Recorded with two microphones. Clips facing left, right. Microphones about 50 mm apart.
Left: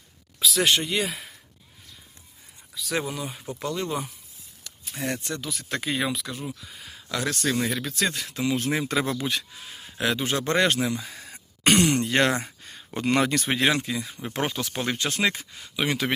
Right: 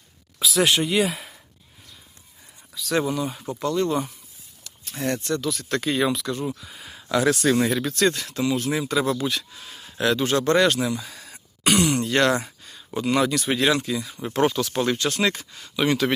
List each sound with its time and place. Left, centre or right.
0.3 s speech: centre
2.7 s speech: centre
6.7 s speech: centre
7.7 s speech: centre
8.3 s speech: centre
8.5 s speech: left
9.6 s speech: centre
11.6 s a sound: left
12.6 s speech: left
13.6 s speech: left